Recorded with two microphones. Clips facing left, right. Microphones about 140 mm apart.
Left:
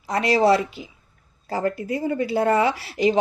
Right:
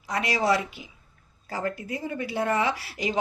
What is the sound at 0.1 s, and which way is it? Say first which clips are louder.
A woman's voice: left 7 dB; 30° left (ahead or behind).